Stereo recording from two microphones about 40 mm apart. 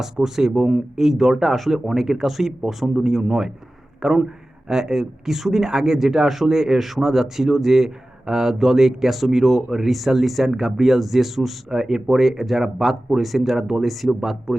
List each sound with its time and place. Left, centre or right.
0.0 s speech: centre